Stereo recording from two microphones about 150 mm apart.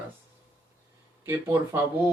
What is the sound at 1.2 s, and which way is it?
Speech, 15° right (ahead or behind).